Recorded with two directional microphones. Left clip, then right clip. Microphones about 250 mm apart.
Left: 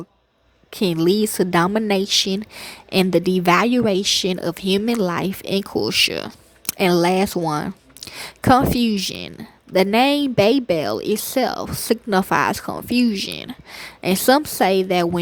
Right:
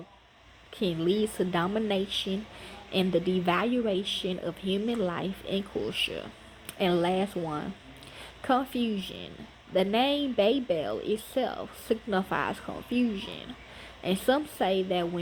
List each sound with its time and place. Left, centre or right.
0.7 s speech: left